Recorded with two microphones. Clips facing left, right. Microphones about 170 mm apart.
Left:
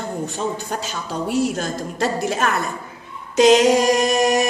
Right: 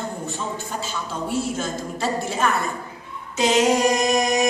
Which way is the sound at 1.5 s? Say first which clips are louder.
Left 2 dB; 75° left (ahead or behind).